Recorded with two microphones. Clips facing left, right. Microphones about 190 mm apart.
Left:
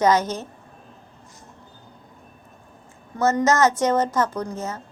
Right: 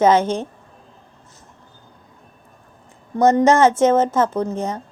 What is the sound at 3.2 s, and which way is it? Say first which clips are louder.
A woman's voice: right 5 dB; 30° right (ahead or behind).